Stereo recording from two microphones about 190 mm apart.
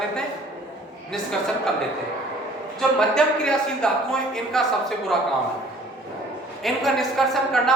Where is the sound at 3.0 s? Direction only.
5° left (ahead or behind).